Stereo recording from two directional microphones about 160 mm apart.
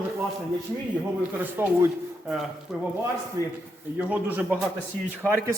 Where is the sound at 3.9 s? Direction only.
10° right (ahead or behind).